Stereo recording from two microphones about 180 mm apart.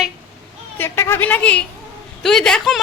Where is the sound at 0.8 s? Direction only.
15° left (ahead or behind).